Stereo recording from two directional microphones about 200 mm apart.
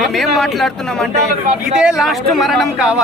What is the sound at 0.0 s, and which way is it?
A man's voice, centre (ahead or behind).